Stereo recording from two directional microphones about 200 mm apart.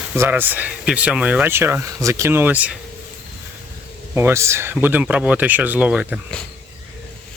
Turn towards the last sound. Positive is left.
turn(degrees=-5)  # may be behind; listen again after turning